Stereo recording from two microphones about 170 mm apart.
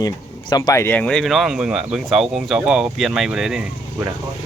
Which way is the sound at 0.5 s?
20° left (ahead or behind).